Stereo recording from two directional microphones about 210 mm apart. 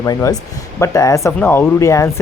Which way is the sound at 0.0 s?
15° left (ahead or behind).